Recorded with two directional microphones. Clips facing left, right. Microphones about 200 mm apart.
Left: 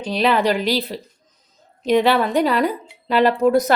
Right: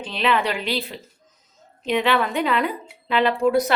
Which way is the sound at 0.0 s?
40° left (ahead or behind).